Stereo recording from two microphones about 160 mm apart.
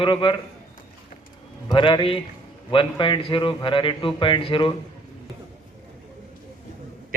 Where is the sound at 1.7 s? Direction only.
30° left (ahead or behind).